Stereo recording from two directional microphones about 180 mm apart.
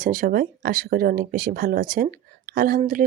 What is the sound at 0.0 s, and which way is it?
Speech, 50° right (ahead or behind).